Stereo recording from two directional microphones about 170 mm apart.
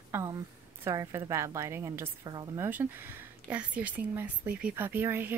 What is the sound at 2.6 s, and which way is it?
A woman's voice, 10° right (ahead or behind).